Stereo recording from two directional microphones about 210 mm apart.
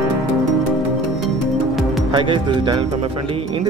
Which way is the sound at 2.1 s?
20° right (ahead or behind).